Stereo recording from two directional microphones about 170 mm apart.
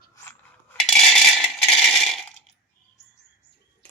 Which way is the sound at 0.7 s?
Centre (ahead or behind).